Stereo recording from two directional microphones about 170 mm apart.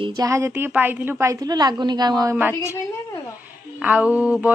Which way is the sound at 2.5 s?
15° left (ahead or behind).